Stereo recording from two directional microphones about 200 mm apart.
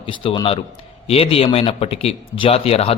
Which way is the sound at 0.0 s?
25° left (ahead or behind).